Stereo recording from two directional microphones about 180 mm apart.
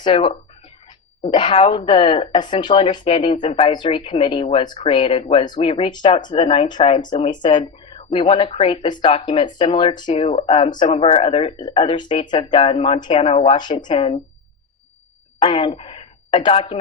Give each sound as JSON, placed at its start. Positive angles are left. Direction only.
{"t": 0.0, "sound": "speech", "side_deg": 30}
{"t": 15.4, "sound": "a woman's voice", "side_deg": 30}